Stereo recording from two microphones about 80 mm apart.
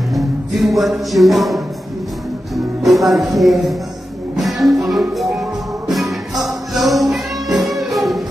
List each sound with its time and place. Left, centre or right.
0.1 s music: centre